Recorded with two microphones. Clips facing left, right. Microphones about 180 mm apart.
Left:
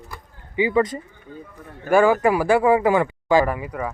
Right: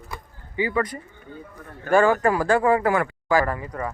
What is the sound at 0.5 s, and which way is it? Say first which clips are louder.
Speech: left 5 dB; 20° left (ahead or behind).